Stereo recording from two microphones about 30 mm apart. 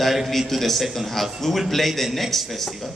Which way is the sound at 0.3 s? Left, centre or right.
Centre.